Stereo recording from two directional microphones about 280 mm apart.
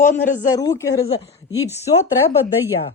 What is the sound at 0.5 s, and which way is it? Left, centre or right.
Speech, centre.